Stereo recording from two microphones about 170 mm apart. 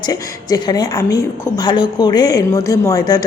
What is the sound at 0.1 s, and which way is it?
A woman's voice, 20° left (ahead or behind).